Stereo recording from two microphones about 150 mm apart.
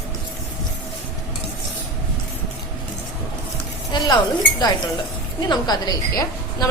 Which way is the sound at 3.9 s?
30° left (ahead or behind).